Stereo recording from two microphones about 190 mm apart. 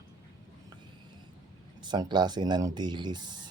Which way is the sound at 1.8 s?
25° right (ahead or behind).